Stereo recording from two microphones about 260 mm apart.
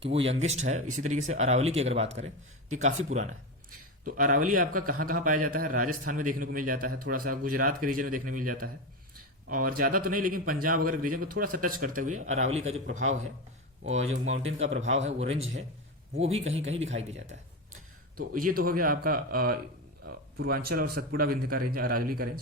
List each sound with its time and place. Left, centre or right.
0.1 s speech: right
18.2 s speech: right